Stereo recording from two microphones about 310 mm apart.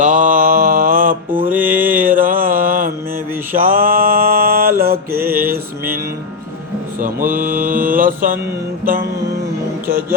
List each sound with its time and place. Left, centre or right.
0.0 s mantra: right
1.5 s mantra: centre
2.1 s mantra: right
5.2 s mantra: centre
7.0 s mantra: right
8.8 s music: right